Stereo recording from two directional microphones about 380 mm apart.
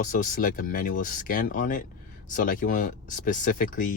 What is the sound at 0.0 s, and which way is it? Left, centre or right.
Speech, left.